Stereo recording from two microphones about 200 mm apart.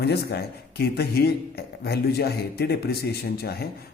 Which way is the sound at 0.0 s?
55° left (ahead or behind).